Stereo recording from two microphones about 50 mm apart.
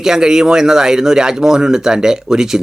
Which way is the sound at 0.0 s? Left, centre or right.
Centre.